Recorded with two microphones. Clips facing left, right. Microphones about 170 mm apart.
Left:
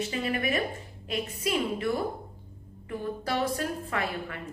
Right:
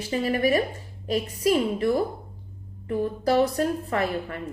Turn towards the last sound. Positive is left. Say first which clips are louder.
# right 6 dB
turn(degrees=-35)  # may be behind; listen again after turning